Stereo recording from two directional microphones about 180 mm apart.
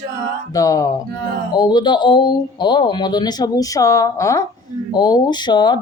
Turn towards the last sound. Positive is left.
turn(degrees=25)  # may be behind; listen again after turning